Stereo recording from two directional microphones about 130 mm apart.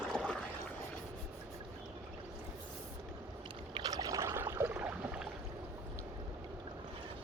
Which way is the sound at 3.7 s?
30° right (ahead or behind).